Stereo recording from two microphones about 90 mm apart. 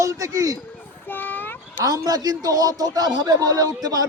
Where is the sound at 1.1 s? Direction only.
20° left (ahead or behind).